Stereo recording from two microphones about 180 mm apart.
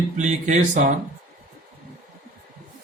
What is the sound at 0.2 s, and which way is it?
Speech, 40° right (ahead or behind).